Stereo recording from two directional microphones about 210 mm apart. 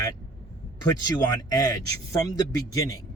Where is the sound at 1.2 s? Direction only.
20° left (ahead or behind).